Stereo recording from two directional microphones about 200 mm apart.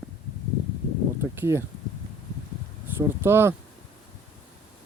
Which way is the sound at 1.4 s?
10° right (ahead or behind).